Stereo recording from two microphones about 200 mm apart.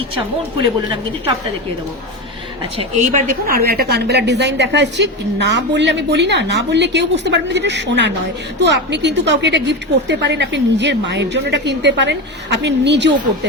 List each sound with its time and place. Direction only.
2.7 s a woman's voice: 35° right (ahead or behind); by 13.5 s 60° right (ahead or behind)